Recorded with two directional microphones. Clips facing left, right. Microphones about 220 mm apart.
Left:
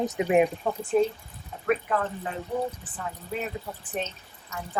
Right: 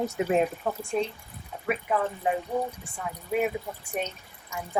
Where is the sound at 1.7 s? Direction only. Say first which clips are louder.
Left 2 dB; 10° right (ahead or behind).